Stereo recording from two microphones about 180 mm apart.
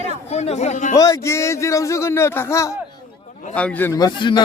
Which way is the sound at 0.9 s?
20° left (ahead or behind).